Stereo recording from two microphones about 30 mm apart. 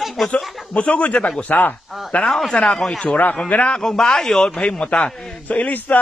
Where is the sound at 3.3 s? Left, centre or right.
Left.